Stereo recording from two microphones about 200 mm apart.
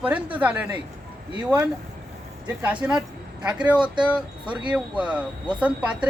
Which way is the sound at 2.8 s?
10° right (ahead or behind).